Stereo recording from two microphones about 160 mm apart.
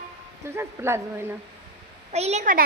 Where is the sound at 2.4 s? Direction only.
55° right (ahead or behind).